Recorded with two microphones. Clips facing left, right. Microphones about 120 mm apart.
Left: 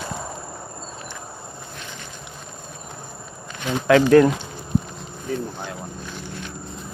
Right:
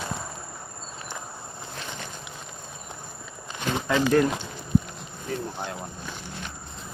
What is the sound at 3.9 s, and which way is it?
Speech, 90° left.